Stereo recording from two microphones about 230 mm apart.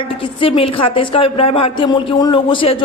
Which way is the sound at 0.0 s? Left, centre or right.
Left.